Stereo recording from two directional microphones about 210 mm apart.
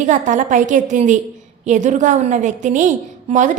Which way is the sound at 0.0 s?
35° right (ahead or behind).